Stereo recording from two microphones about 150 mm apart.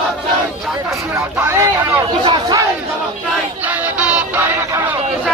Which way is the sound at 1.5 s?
15° right (ahead or behind).